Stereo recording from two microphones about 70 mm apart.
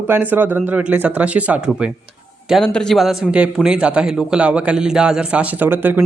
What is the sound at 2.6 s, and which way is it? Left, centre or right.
A man's voice, centre.